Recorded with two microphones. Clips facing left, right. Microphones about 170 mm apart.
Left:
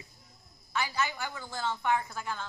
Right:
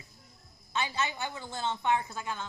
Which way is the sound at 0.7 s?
25° right (ahead or behind).